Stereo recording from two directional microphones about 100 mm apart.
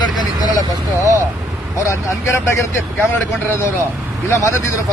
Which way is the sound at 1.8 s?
30° left (ahead or behind).